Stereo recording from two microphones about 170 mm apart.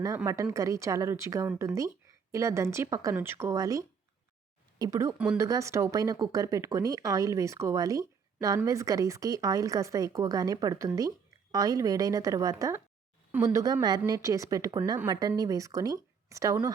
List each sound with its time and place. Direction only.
0.5 s speech: 20° right (ahead or behind)
5.1 s speech: 5° right (ahead or behind)
5.4 s speech: 15° right (ahead or behind)